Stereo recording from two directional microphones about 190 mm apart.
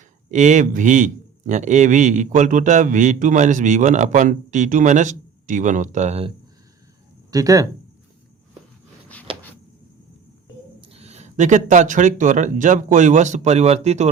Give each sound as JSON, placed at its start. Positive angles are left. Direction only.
{"t": 0.3, "sound": "a man's voice", "side_deg": -40}
{"t": 7.3, "sound": "speech", "side_deg": -20}
{"t": 10.8, "sound": "a man's voice", "side_deg": -30}